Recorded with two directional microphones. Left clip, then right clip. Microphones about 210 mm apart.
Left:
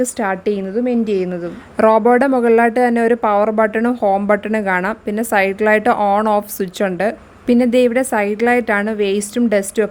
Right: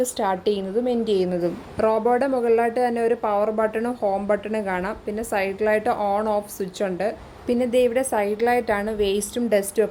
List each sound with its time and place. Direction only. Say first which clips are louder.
0.0 s a woman's voice: left 4 dB; 35° left (ahead or behind)